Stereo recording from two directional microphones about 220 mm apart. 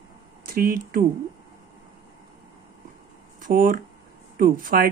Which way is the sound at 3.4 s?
40° right (ahead or behind).